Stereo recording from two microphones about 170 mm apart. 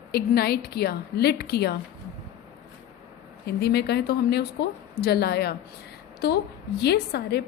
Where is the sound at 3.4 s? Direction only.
70° left (ahead or behind).